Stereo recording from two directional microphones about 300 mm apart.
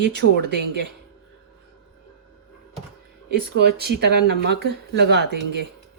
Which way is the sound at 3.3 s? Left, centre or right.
Right.